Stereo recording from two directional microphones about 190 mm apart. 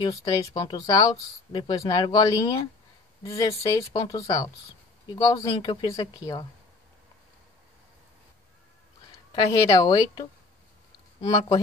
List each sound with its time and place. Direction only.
0.0 s speech: 20° left (ahead or behind)
9.3 s speech: 25° left (ahead or behind)